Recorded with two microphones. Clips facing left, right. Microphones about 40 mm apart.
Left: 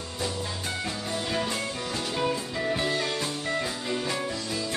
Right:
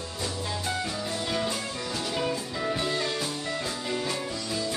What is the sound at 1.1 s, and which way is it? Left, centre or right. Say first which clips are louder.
Music: left 2 dB; left.